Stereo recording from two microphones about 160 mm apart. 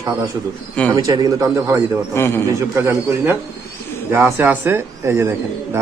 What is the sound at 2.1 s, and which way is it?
Speech, 15° left (ahead or behind).